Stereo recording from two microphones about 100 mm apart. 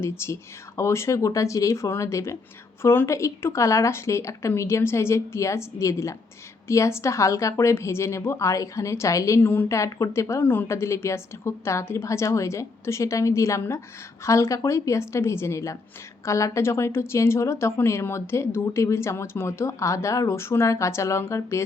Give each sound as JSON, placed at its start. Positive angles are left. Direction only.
{"t": 0.0, "sound": "speech", "side_deg": 25}